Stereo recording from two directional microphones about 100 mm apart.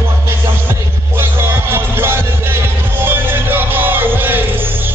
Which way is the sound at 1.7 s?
25° right (ahead or behind).